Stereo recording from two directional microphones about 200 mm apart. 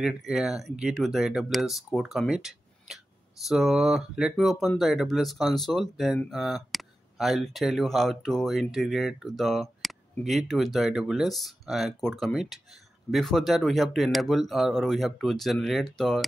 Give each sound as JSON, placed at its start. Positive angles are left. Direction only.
{"t": 0.0, "sound": "speech", "side_deg": 0}